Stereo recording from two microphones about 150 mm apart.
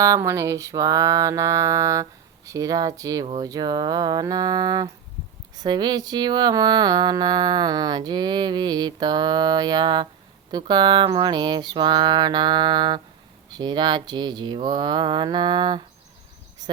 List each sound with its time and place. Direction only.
0.0 s mantra: 20° right (ahead or behind)